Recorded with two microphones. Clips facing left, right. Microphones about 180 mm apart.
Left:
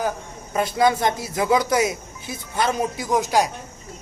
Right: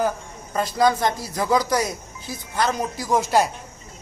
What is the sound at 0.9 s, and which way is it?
Speech, 25° left (ahead or behind).